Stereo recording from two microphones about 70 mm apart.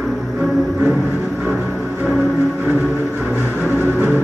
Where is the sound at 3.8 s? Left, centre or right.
Right.